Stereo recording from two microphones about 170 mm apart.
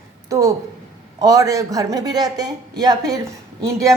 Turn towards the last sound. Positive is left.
turn(degrees=-20)  # may be behind; listen again after turning